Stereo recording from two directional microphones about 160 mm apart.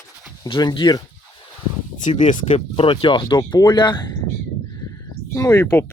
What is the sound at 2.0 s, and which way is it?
Speech, 50° left (ahead or behind).